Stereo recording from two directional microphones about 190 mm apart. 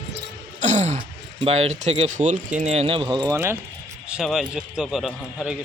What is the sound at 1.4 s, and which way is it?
A man's voice, 35° right (ahead or behind).